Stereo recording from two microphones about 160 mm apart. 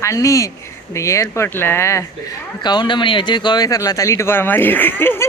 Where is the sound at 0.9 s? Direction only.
20° left (ahead or behind).